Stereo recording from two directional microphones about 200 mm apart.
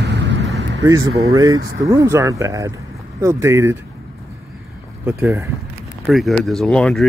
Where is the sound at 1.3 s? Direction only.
20° right (ahead or behind).